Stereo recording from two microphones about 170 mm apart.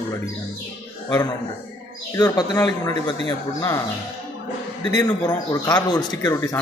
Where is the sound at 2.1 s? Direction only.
20° left (ahead or behind).